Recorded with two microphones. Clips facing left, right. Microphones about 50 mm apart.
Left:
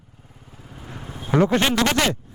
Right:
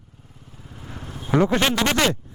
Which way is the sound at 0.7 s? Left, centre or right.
Centre.